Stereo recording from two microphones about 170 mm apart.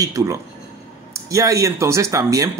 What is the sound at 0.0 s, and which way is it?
Speech, 20° right (ahead or behind).